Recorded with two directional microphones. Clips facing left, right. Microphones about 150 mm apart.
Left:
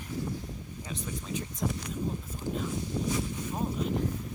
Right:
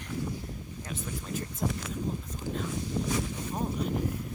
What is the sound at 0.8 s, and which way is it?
Speech, 5° right (ahead or behind).